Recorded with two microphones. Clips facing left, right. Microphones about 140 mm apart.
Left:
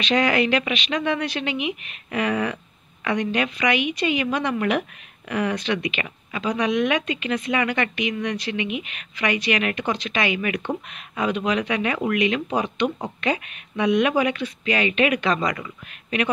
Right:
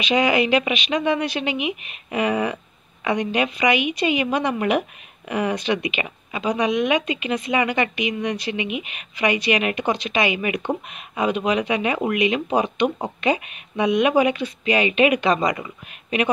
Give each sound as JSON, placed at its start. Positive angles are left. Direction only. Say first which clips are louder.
{"t": 0.0, "sound": "speech", "louder": "right 1 dB", "side_deg": -10}